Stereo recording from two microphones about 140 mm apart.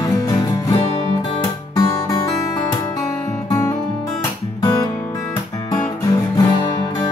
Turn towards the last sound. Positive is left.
turn(degrees=30)  # may be behind; listen again after turning